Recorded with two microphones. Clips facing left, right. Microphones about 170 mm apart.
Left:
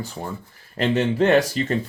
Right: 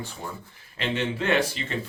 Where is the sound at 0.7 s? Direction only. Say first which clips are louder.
Left 8 dB; 40° left (ahead or behind).